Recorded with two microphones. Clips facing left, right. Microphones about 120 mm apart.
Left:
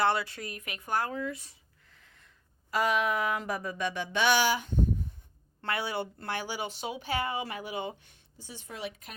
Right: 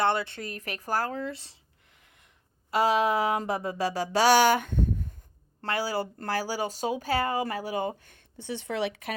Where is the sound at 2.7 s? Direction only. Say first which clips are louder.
Right 4 dB; 30° right (ahead or behind); by 4.8 s 60° right (ahead or behind).